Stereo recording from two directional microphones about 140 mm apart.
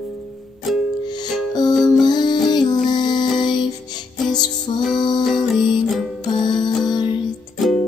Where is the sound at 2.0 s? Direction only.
30° left (ahead or behind).